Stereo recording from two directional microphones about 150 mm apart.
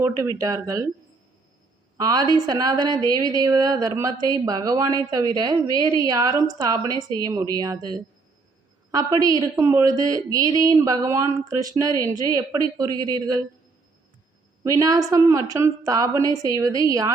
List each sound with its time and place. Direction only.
0.3 s speech: 25° right (ahead or behind)
2.0 s speech: 25° right (ahead or behind)
14.6 s speech: 25° right (ahead or behind)